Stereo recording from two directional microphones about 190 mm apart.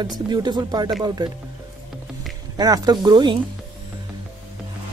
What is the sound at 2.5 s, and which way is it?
Speech, 20° right (ahead or behind).